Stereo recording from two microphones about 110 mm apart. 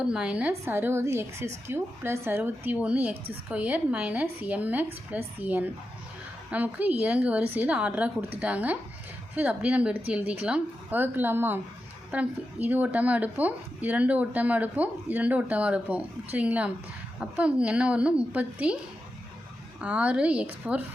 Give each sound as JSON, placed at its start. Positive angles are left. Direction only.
{"t": 0.0, "sound": "a woman's voice", "side_deg": -10}
{"t": 19.8, "sound": "a woman's voice", "side_deg": -10}